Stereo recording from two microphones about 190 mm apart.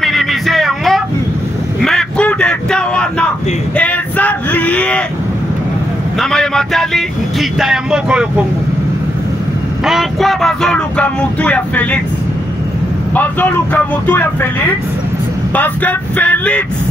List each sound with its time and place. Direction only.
0.0 s music: centre (ahead or behind)
1.8 s a sound: centre (ahead or behind)
3.7 s speech: 5° left (ahead or behind)
6.1 s speech: centre (ahead or behind)
9.8 s speech: centre (ahead or behind)
13.1 s speech: 10° left (ahead or behind)
15.5 s speech: 10° left (ahead or behind)